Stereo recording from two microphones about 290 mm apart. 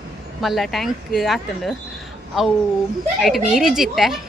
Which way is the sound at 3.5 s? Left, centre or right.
Centre.